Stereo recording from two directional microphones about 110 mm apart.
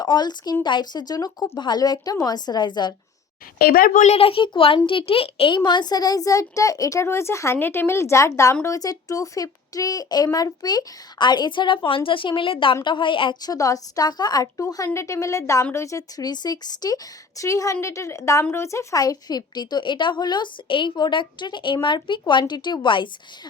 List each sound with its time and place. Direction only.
0.0 s a child's voice: 40° left (ahead or behind)
4.0 s a child's voice: 65° left (ahead or behind)
13.4 s a child's voice: 35° left (ahead or behind)